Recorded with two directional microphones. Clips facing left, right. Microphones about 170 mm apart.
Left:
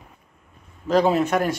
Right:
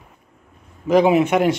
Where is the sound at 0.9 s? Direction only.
15° right (ahead or behind).